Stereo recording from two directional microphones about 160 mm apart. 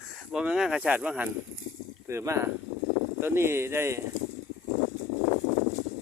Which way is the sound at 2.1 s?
20° right (ahead or behind).